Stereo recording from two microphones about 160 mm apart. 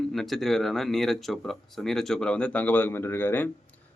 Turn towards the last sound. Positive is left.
turn(degrees=15)  # may be behind; listen again after turning